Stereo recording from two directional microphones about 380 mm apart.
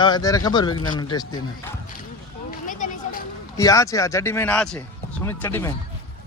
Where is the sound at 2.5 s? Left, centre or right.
Left.